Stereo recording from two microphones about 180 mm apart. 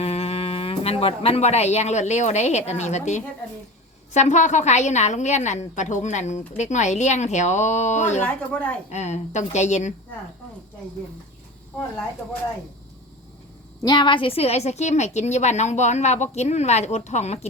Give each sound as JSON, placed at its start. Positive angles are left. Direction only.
{"t": 0.0, "sound": "a woman's voice", "side_deg": 35}
{"t": 13.8, "sound": "a woman's voice", "side_deg": 25}